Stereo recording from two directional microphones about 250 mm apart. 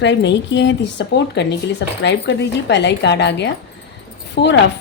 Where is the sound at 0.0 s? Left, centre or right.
Left.